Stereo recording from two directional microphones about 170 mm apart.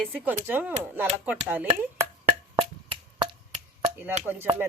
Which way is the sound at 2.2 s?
35° right (ahead or behind).